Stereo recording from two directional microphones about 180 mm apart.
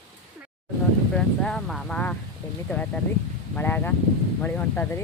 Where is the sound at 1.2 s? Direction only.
5° left (ahead or behind).